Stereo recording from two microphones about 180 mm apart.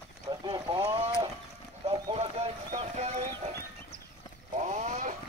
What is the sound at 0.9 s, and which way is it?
Boat, 30° right (ahead or behind).